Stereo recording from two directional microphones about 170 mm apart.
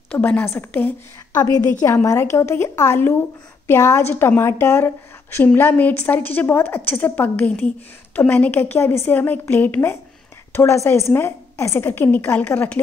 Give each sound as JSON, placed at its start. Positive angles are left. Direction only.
{"t": 0.1, "sound": "a woman's voice", "side_deg": 10}
{"t": 1.3, "sound": "a woman's voice", "side_deg": 20}